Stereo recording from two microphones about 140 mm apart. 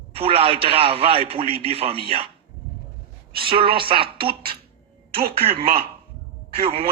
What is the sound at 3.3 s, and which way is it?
A man's voice, 40° right (ahead or behind).